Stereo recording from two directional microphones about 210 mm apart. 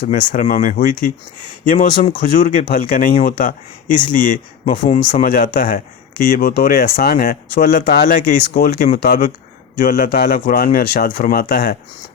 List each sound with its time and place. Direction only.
0.0 s speech: 40° left (ahead or behind)